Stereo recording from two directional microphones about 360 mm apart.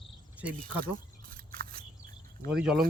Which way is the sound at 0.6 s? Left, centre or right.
Right.